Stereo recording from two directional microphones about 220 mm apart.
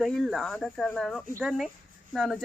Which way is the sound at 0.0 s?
Centre (ahead or behind).